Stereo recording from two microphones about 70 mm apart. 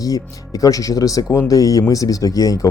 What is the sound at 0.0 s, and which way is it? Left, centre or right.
A man's voice, left.